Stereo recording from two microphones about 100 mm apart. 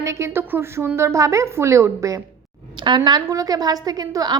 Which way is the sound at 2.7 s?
50° right (ahead or behind).